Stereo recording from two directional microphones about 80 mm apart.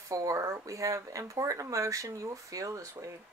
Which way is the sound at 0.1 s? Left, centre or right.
Right.